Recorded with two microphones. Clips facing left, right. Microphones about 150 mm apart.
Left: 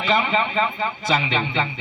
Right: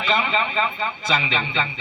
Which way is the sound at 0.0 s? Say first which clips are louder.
Left 2 dB; 50° left (ahead or behind).